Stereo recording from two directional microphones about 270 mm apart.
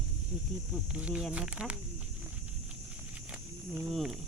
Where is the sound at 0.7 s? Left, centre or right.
Centre.